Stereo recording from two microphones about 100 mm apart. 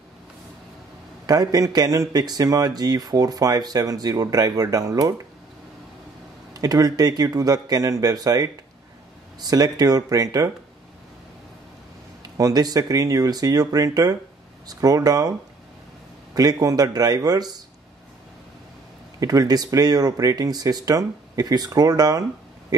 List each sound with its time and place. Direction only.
1.2 s speech: 40° right (ahead or behind)
6.5 s speech: 35° right (ahead or behind)
12.4 s speech: 35° right (ahead or behind)
16.3 s speech: 40° right (ahead or behind)
19.1 s speech: 35° right (ahead or behind)
22.7 s a sound: 40° right (ahead or behind)